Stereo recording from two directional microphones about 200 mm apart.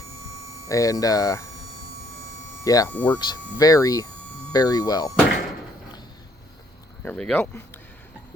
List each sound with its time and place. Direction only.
0.7 s speech: 15° left (ahead or behind)
2.6 s speech: 15° left (ahead or behind)
2.9 s speech: 5° left (ahead or behind)
3.2 s speech: 20° left (ahead or behind)
7.0 s speech: 5° left (ahead or behind)